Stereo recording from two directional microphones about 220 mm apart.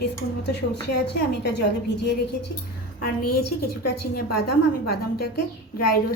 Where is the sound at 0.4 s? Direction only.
50° left (ahead or behind).